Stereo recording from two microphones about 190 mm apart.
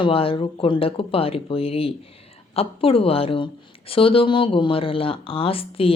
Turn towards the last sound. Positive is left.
turn(degrees=30)  # may be behind; listen again after turning